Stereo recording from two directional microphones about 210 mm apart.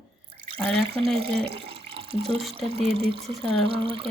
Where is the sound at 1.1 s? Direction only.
25° right (ahead or behind).